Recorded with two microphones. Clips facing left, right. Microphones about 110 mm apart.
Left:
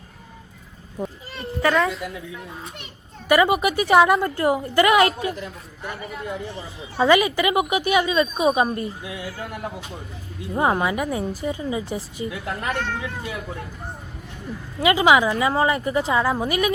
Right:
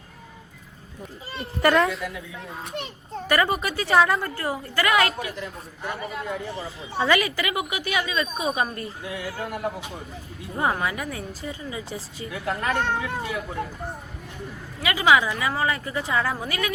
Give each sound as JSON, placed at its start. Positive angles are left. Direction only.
{"t": 1.4, "sound": "a child's voice", "side_deg": 0}
{"t": 3.2, "sound": "a woman's voice", "side_deg": 10}
{"t": 6.9, "sound": "a woman's voice", "side_deg": 25}
{"t": 10.5, "sound": "a woman's voice", "side_deg": 20}
{"t": 12.7, "sound": "speech", "side_deg": -30}
{"t": 14.8, "sound": "a woman's voice", "side_deg": 25}